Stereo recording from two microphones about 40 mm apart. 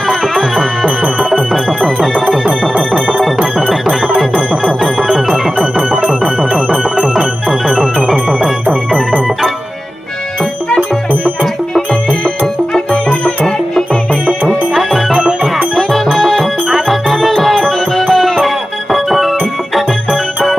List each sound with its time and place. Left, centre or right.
0.5 s music: centre
0.9 s music: right
1.5 s music: centre
2.4 s music: right
5.3 s music: right
12.9 s music: left
14.8 s music: centre